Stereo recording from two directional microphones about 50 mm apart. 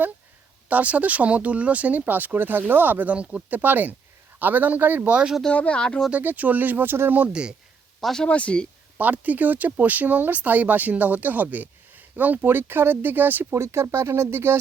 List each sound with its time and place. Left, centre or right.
0.7 s speech: right
5.0 s speech: right
5.5 s speech: left
6.1 s speech: right
8.0 s speech: centre
8.3 s speech: left
9.0 s speech: right
13.5 s speech: right